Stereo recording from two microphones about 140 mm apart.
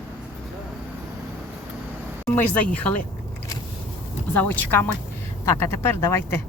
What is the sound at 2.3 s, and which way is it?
Speech, 10° left (ahead or behind).